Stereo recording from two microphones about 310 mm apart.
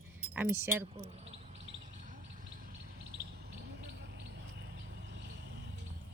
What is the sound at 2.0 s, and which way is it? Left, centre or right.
Chirp, right.